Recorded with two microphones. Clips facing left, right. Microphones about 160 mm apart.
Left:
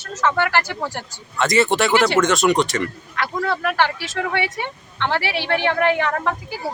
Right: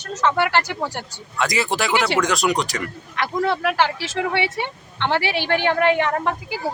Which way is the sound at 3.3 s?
15° right (ahead or behind).